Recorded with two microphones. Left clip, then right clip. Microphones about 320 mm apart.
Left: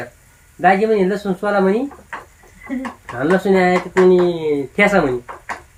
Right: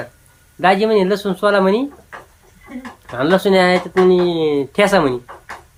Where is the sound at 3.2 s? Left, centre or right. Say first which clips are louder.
Right 2 dB; centre.